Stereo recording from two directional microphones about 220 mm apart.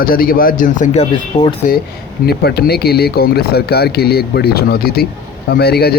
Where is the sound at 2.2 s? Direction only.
45° left (ahead or behind).